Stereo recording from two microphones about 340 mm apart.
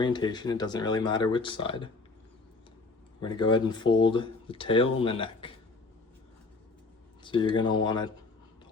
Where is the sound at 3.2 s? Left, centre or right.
Centre.